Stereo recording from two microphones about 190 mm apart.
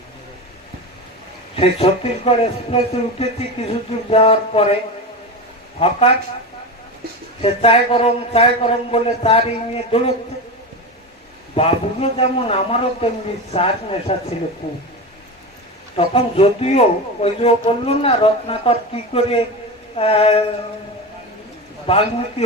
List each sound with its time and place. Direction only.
1.5 s speech: 30° left (ahead or behind)
5.8 s speech: 30° left (ahead or behind)
7.4 s speech: 30° left (ahead or behind)
11.5 s speech: 30° left (ahead or behind)
14.1 s speech: 35° left (ahead or behind)
16.0 s speech: 30° left (ahead or behind)
21.8 s speech: 30° left (ahead or behind)